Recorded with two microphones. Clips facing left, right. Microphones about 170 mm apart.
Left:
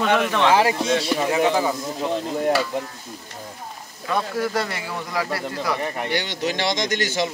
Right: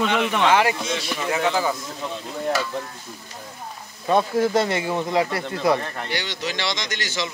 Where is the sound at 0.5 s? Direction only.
30° left (ahead or behind).